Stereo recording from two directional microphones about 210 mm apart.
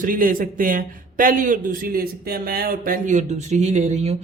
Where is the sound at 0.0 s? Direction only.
40° right (ahead or behind).